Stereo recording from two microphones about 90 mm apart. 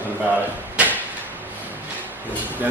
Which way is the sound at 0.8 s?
15° right (ahead or behind).